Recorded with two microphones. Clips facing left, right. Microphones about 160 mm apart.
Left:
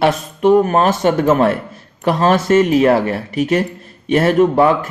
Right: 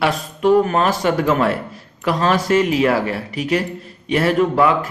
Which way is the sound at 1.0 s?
40° left (ahead or behind).